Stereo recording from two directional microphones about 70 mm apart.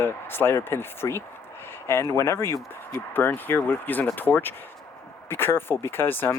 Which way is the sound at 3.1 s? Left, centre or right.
Left.